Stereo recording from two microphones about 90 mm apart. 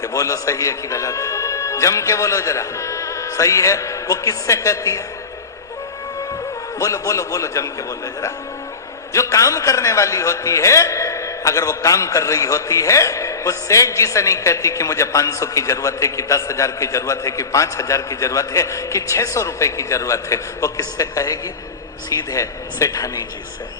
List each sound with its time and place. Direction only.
0.0 s a man's voice: 40° left (ahead or behind)
6.7 s a man's voice: 35° left (ahead or behind)
9.1 s a man's voice: 35° left (ahead or behind)